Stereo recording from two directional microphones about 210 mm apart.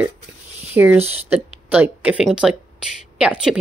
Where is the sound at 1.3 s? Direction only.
10° right (ahead or behind).